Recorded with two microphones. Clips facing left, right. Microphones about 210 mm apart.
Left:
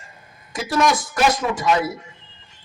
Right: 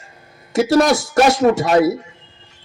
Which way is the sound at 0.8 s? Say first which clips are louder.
Right 3 dB; 70° right (ahead or behind).